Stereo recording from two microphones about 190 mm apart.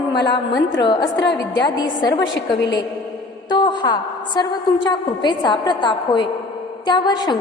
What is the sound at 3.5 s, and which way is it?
A woman's voice, 25° left (ahead or behind).